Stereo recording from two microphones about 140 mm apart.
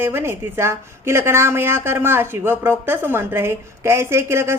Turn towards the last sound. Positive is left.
turn(degrees=-20)  # may be behind; listen again after turning